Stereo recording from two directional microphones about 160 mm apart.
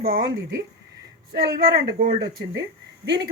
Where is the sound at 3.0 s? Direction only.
90° right.